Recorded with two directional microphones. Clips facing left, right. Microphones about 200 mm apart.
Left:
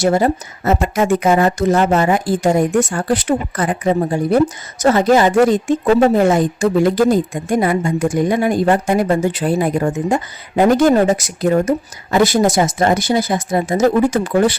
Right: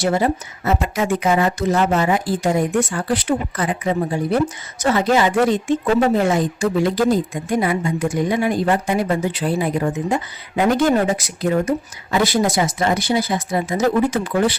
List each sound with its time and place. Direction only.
0.0 s a woman's voice: 45° left (ahead or behind)